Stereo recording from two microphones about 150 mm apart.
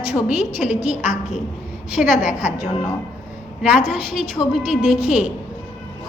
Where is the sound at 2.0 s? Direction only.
5° right (ahead or behind).